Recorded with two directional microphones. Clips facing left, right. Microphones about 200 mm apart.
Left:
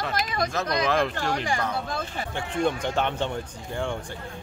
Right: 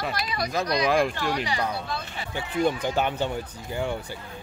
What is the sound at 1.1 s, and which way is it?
Speech, 50° left (ahead or behind).